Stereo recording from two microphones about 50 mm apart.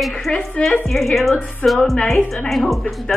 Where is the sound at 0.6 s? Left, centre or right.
Left.